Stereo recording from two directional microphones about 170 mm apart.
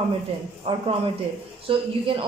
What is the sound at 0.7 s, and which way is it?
A woman's voice, 35° right (ahead or behind).